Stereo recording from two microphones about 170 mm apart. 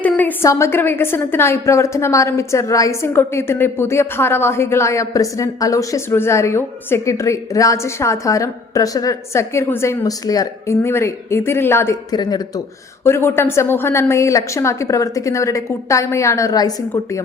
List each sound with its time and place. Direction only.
0.0 s a woman's voice: 10° left (ahead or behind)